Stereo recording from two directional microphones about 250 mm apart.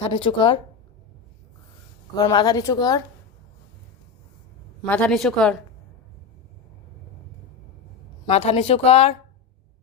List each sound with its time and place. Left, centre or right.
0.0 s speech: left
2.1 s speech: centre
4.8 s speech: centre
8.3 s speech: left